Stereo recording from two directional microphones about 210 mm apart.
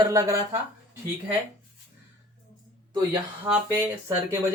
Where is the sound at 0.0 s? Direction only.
15° right (ahead or behind).